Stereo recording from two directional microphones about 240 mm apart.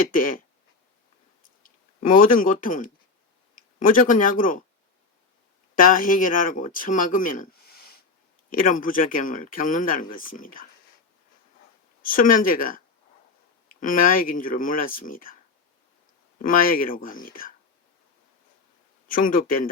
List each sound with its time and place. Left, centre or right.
0.1 s speech: left
1.6 s speech: left
5.7 s speech: left
12.0 s speech: left
16.4 s speech: left
19.0 s speech: left